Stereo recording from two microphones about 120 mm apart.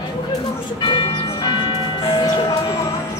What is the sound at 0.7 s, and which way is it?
Music, 40° left (ahead or behind).